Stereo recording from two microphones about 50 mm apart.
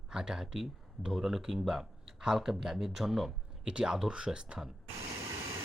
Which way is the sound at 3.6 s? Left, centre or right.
Centre.